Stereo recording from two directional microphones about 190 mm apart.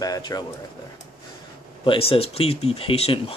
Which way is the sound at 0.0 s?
20° left (ahead or behind).